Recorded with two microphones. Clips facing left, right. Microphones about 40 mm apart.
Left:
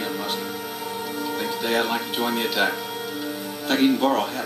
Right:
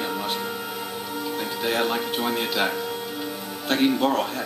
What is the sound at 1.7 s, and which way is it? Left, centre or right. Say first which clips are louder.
Music: even; centre.